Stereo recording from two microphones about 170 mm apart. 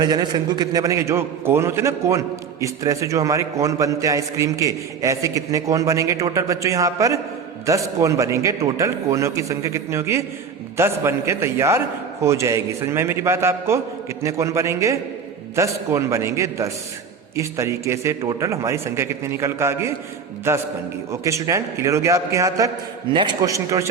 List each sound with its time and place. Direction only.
0.0 s a man's voice: 25° right (ahead or behind)